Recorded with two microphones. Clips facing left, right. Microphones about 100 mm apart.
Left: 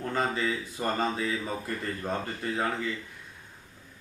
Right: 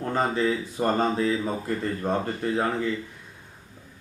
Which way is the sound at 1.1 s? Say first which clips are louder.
Right 7 dB; centre (ahead or behind).